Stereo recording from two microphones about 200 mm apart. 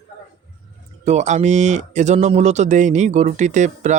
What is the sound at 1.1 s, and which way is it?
Speech, 35° right (ahead or behind).